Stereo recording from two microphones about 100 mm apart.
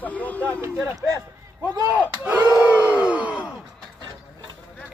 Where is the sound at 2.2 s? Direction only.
15° right (ahead or behind).